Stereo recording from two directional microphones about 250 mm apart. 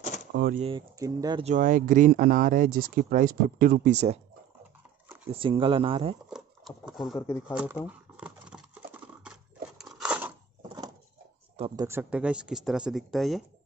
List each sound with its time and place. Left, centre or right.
0.3 s speech: right
0.6 s speech: centre
1.5 s speech: right
5.0 s a sound: centre
5.3 s speech: right
6.3 s speech: centre
7.2 s speech: centre
7.5 s a sound: centre
11.5 s speech: centre